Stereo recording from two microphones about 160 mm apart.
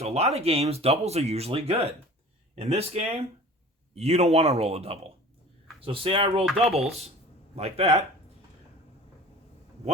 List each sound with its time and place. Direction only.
0.0 s speech: 40° right (ahead or behind)